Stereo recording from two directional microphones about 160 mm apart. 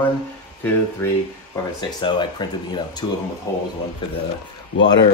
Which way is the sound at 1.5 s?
25° left (ahead or behind).